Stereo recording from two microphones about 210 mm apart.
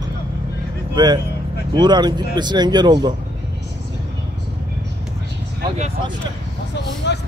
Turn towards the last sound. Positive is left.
turn(degrees=55)  # may be behind; listen again after turning